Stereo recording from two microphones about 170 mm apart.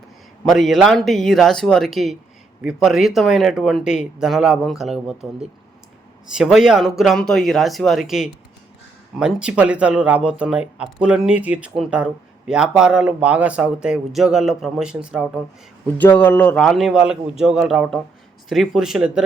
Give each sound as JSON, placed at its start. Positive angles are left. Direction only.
{"t": 0.5, "sound": "speech", "side_deg": 0}
{"t": 16.0, "sound": "speech", "side_deg": 10}